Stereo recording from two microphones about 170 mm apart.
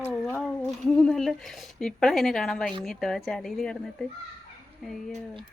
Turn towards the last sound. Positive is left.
turn(degrees=0)  # may be behind; listen again after turning